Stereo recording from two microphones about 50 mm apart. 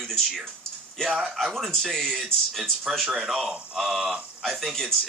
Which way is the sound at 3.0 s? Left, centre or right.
Centre.